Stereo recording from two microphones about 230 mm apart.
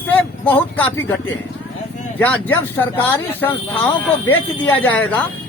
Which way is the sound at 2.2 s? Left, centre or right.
Centre.